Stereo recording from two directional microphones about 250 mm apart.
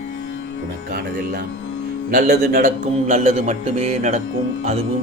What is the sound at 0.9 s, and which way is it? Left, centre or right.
A man's voice, right.